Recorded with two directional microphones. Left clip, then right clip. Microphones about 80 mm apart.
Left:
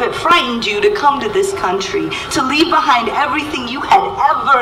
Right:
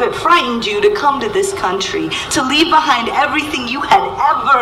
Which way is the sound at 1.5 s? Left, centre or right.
Right.